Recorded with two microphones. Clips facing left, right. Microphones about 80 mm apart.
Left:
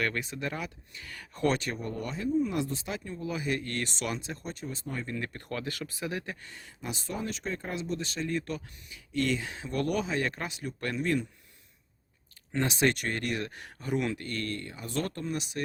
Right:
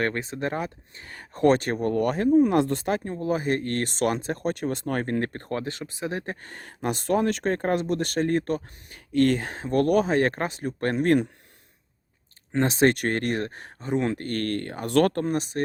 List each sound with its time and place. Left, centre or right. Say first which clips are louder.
0.0 s speech: right 5 dB; right
12.5 s speech: right 7 dB; right
13.7 s speech: right 5 dB; right
14.1 s speech: right 7 dB; right